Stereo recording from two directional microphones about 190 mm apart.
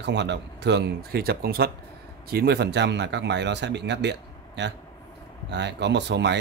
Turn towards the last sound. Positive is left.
turn(degrees=-65)  # may be behind; listen again after turning